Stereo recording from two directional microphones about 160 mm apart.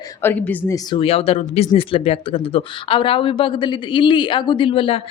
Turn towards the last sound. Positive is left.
turn(degrees=35)  # may be behind; listen again after turning